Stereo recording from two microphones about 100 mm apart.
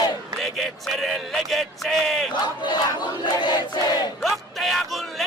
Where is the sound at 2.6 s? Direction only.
45° left (ahead or behind).